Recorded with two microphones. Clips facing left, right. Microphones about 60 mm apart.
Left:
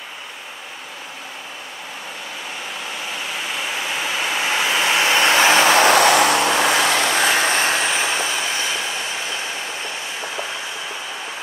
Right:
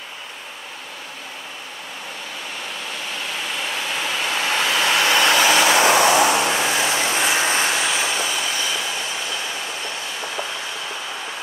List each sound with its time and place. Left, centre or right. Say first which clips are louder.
3.3 s waves: left 1 dB; centre
5.3 s vehicle: left 4 dB; left
5.8 s vehicle: left 2 dB; left